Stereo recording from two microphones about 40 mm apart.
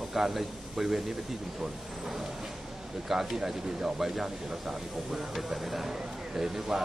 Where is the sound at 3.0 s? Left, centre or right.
Centre.